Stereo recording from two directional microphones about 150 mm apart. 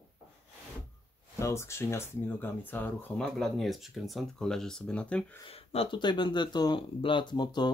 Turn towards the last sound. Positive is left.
turn(degrees=30)  # may be behind; listen again after turning